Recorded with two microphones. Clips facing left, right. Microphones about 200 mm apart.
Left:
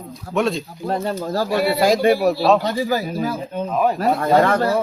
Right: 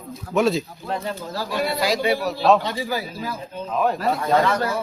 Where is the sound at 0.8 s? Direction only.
40° left (ahead or behind).